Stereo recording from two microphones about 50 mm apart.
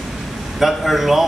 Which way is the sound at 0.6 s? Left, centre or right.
Centre.